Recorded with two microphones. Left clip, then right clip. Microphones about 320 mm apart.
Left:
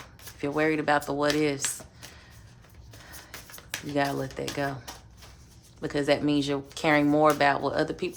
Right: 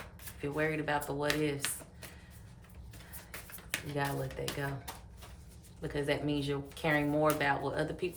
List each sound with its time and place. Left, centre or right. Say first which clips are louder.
0.4 s speech: left 8 dB; centre
3.5 s speech: left 8 dB; centre
5.8 s speech: left 9 dB; left